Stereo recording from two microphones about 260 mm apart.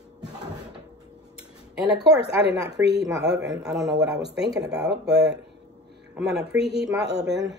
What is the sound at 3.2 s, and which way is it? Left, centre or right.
Speech, right.